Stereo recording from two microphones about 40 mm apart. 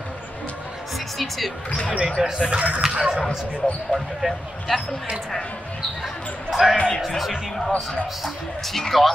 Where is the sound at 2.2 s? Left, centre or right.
Right.